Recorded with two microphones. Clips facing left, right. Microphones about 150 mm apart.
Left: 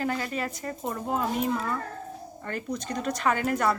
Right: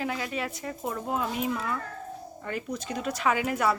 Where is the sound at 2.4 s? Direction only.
5° right (ahead or behind).